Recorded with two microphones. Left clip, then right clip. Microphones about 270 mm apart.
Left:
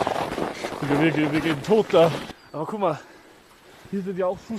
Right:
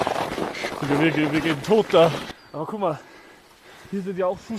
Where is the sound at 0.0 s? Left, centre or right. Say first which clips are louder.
Even; centre.